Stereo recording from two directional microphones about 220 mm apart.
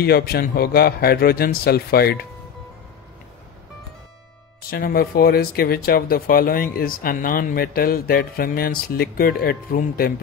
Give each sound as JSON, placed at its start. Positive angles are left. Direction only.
{"t": 0.0, "sound": "speech", "side_deg": 45}
{"t": 4.6, "sound": "speech", "side_deg": 40}